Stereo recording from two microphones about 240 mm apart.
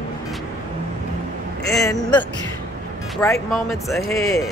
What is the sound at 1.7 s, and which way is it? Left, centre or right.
Speech, centre.